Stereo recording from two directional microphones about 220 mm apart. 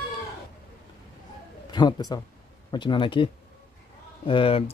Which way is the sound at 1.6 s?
20° left (ahead or behind).